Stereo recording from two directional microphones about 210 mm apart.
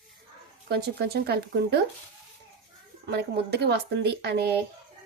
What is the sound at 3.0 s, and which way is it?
Speech, 50° right (ahead or behind).